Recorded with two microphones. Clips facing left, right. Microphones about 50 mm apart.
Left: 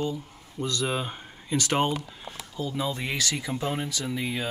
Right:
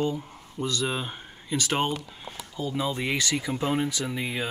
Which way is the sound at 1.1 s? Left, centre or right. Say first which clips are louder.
Left 1 dB; centre.